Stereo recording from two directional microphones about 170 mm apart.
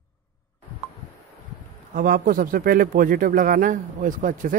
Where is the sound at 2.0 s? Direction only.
60° right (ahead or behind).